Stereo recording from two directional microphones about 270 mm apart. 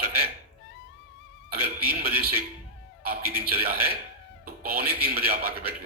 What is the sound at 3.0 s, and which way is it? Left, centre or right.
Speech, right.